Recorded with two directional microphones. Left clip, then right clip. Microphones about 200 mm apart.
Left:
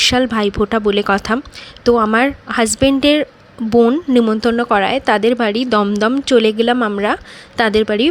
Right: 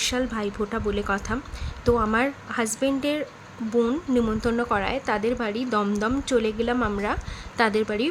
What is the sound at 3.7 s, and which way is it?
A woman's voice, 30° left (ahead or behind).